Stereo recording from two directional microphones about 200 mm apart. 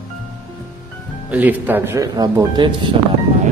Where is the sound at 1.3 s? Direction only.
10° right (ahead or behind).